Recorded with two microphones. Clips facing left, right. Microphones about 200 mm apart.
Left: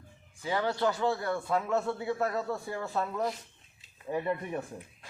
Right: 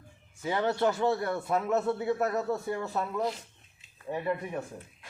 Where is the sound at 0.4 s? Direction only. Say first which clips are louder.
Right 2 dB; 25° right (ahead or behind).